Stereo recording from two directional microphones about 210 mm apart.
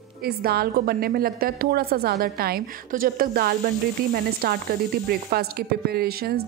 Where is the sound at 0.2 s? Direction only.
45° right (ahead or behind).